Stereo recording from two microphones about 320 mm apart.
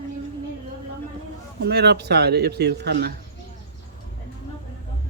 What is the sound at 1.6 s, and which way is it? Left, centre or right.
Speech, right.